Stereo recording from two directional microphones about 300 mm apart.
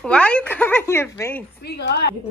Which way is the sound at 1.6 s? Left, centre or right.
Left.